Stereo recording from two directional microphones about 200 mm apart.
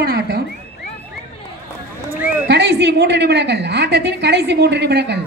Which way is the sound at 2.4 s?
60° right (ahead or behind).